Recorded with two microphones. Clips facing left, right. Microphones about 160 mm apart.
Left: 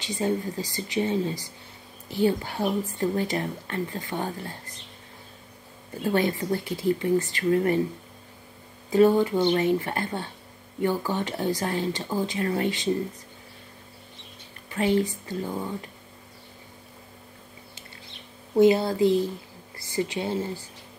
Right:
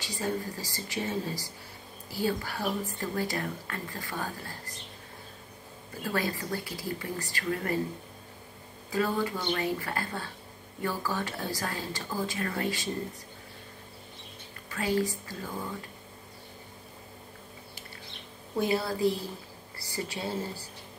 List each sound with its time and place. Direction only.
0.0 s speech: 20° left (ahead or behind)
6.1 s speech: 20° left (ahead or behind)
8.9 s speech: 20° left (ahead or behind)
14.7 s speech: 20° left (ahead or behind)
18.6 s speech: 20° left (ahead or behind)